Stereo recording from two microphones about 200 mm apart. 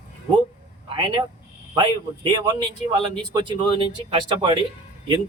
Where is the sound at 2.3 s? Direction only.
25° right (ahead or behind).